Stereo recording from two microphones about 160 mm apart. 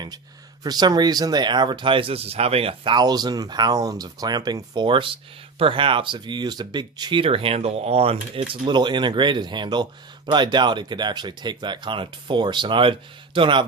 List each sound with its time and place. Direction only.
0.6 s speech: 25° right (ahead or behind)